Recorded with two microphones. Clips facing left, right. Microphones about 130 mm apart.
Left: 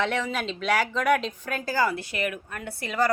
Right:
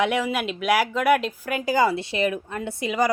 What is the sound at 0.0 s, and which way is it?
Speech, 10° right (ahead or behind).